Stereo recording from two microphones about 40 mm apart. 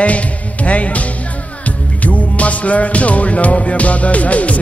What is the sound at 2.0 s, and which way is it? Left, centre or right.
Music, left.